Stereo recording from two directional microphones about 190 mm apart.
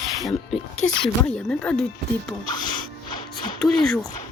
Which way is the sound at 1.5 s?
5° left (ahead or behind).